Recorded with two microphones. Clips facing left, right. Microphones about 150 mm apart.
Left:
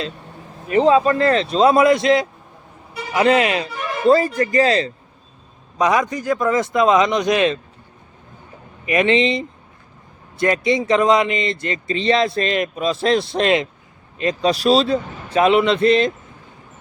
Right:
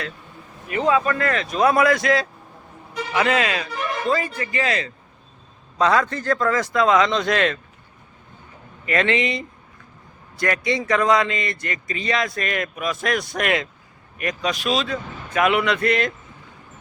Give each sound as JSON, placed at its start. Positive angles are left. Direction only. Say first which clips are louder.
{"t": 0.7, "sound": "speech", "louder": "left 6 dB", "side_deg": 30}
{"t": 4.0, "sound": "speech", "louder": "left 11 dB", "side_deg": 35}
{"t": 5.7, "sound": "a man's voice", "louder": "left 1 dB", "side_deg": 15}
{"t": 8.9, "sound": "speech", "louder": "left 5 dB", "side_deg": 20}